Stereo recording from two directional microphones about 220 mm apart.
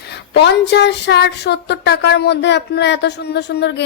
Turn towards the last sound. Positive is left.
turn(degrees=50)  # may be behind; listen again after turning